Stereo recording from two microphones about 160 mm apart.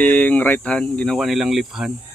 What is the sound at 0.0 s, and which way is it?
Speech, 10° left (ahead or behind).